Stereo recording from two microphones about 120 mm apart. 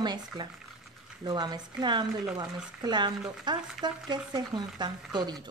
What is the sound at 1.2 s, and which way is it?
Speech, 35° right (ahead or behind).